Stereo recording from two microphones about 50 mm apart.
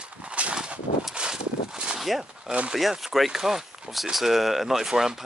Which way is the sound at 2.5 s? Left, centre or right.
Right.